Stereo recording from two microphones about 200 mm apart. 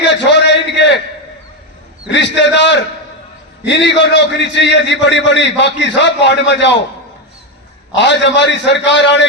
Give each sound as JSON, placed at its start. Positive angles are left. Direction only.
{"t": 0.3, "sound": "a sound", "side_deg": 60}
{"t": 2.1, "sound": "a man's voice", "side_deg": 60}
{"t": 7.9, "sound": "a man's voice", "side_deg": 60}